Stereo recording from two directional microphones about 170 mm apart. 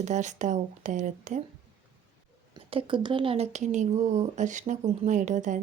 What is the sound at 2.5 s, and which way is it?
Speech, 30° right (ahead or behind).